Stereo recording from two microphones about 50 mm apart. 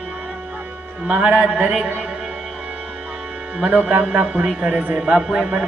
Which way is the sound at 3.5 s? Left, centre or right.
Right.